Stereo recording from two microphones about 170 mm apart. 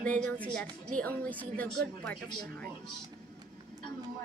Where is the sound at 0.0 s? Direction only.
10° left (ahead or behind).